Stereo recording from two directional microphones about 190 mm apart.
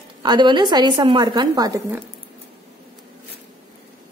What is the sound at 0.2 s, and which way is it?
Speech, 25° right (ahead or behind).